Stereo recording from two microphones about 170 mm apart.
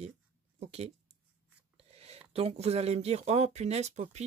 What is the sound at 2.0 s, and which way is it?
Speech, 35° right (ahead or behind).